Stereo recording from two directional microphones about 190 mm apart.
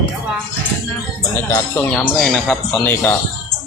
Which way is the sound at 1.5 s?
15° left (ahead or behind).